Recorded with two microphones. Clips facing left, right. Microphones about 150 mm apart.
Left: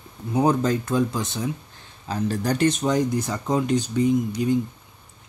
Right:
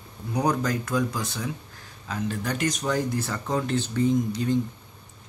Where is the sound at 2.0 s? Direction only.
35° left (ahead or behind).